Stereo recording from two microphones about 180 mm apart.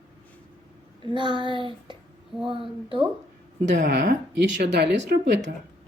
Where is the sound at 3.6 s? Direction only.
75° right (ahead or behind).